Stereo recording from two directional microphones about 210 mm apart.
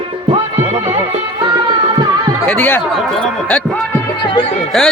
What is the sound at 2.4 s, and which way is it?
Speech, 5° left (ahead or behind).